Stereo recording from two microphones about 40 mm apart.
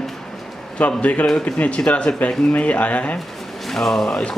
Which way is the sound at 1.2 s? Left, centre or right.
Centre.